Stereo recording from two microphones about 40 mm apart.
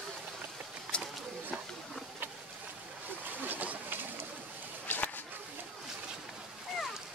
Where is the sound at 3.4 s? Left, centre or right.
Right.